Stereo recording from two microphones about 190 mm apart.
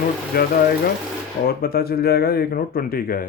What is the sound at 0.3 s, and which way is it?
Speech, 50° left (ahead or behind).